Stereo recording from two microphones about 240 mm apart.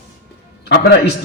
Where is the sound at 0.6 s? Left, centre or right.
Left.